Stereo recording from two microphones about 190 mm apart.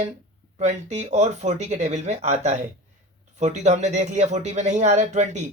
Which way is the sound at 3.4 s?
35° right (ahead or behind).